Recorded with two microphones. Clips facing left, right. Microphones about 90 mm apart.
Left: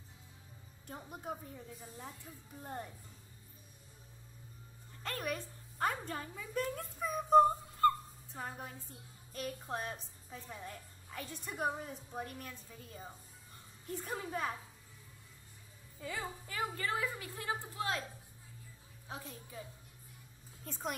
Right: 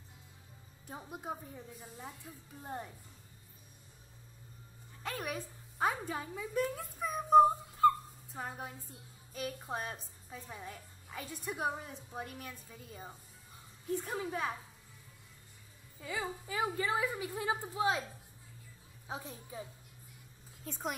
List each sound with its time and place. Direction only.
0.8 s a woman's voice: 5° right (ahead or behind)
5.0 s a woman's voice: 5° right (ahead or behind)
16.0 s a woman's voice: 5° right (ahead or behind)
19.0 s a woman's voice: 20° right (ahead or behind)
20.6 s a woman's voice: centre (ahead or behind)